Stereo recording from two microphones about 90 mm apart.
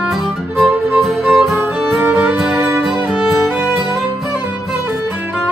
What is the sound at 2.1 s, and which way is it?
Music, 15° right (ahead or behind).